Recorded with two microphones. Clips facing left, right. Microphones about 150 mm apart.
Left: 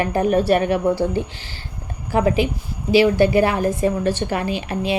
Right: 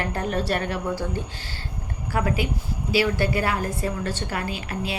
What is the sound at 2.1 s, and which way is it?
A woman's voice, 20° left (ahead or behind).